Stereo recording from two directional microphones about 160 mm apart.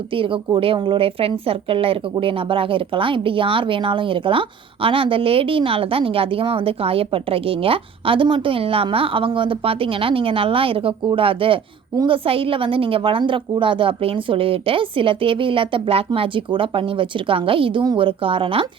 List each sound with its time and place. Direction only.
0.1 s speech: 35° right (ahead or behind)